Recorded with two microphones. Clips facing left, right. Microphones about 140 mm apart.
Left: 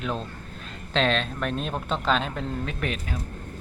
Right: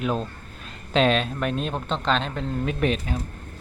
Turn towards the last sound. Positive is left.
turn(degrees=-20)  # may be behind; listen again after turning